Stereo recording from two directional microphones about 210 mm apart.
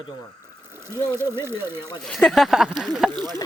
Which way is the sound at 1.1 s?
10° right (ahead or behind).